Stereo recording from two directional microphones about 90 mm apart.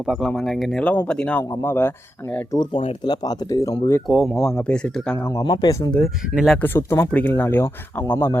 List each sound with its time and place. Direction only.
0.0 s speech: 5° right (ahead or behind)
1.4 s speech: 25° left (ahead or behind)
2.7 s speech: 90° left
3.1 s speech: 45° left (ahead or behind)
4.0 s speech: centre (ahead or behind)
5.1 s speech: 30° left (ahead or behind)
5.4 s speech: 50° left (ahead or behind)
6.3 s speech: 5° right (ahead or behind)
6.6 s speech: 25° left (ahead or behind)